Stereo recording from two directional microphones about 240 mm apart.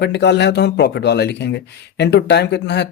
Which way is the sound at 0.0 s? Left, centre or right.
Left.